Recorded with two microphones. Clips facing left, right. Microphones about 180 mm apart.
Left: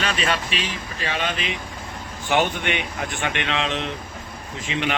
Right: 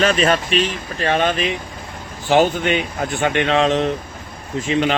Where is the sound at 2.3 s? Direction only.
35° right (ahead or behind).